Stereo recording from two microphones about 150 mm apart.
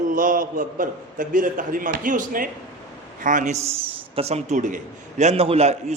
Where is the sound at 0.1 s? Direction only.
65° right (ahead or behind).